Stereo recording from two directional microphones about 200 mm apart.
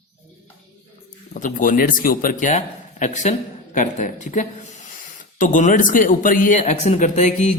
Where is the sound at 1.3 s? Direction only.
40° left (ahead or behind).